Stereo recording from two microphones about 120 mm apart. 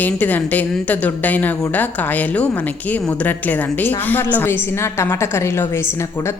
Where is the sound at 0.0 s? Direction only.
15° left (ahead or behind).